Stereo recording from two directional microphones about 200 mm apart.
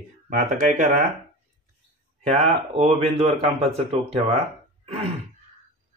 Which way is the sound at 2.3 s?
35° right (ahead or behind).